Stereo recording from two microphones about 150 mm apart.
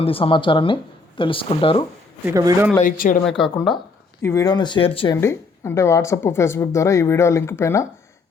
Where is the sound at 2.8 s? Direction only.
65° left (ahead or behind).